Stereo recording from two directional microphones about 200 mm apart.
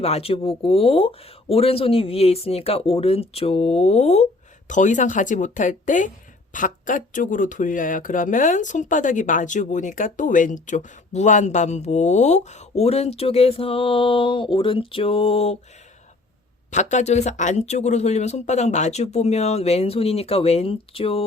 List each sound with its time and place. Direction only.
0.0 s speech: 30° left (ahead or behind)
16.7 s speech: 35° left (ahead or behind)